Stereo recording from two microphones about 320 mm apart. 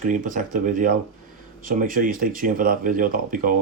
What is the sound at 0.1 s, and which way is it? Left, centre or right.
Speech, right.